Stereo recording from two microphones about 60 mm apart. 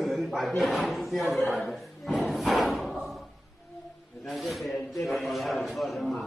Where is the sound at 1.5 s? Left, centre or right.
Centre.